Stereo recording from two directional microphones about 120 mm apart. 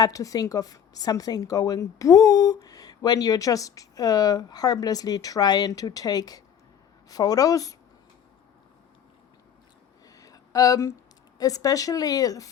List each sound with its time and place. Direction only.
0.0 s a woman's voice: 30° left (ahead or behind)
10.2 s a sound: 30° left (ahead or behind)
11.3 s a woman's voice: 30° left (ahead or behind)